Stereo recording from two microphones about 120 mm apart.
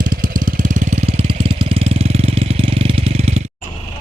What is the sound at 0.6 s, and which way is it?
Vehicle, 90° right.